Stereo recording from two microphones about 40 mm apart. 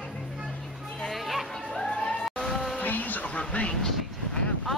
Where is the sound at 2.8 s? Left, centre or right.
Left.